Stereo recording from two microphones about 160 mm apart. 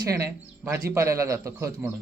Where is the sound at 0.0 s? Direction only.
20° right (ahead or behind).